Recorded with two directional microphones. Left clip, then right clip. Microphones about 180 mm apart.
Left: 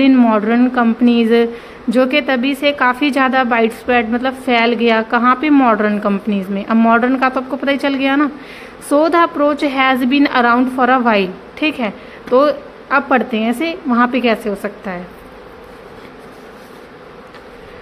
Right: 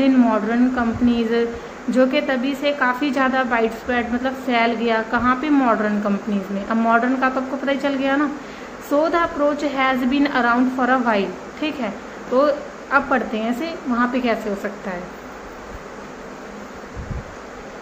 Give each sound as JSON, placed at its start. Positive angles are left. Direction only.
{"t": 0.0, "sound": "a woman's voice", "side_deg": 55}